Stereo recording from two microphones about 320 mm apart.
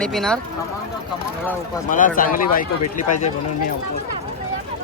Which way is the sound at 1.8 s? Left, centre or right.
Left.